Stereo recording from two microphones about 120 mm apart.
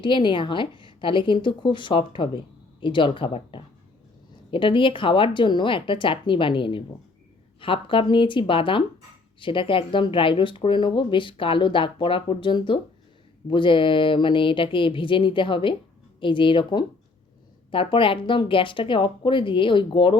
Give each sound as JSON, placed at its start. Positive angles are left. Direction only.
{"t": 0.0, "sound": "speech", "side_deg": 40}